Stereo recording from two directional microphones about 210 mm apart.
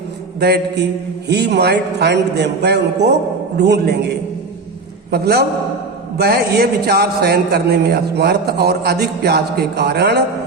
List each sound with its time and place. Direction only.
0.3 s a man's voice: 50° right (ahead or behind)